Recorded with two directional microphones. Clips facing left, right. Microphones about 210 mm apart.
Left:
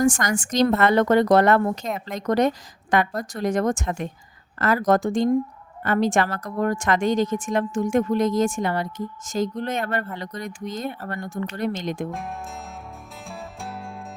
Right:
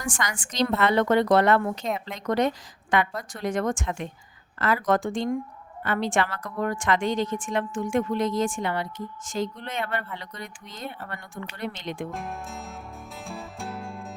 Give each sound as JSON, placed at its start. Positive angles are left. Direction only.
{"t": 0.0, "sound": "a woman's voice", "side_deg": 45}
{"t": 12.1, "sound": "speech", "side_deg": 0}
{"t": 13.2, "sound": "music", "side_deg": 0}